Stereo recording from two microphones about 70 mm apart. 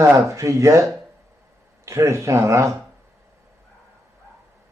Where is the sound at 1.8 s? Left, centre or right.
Right.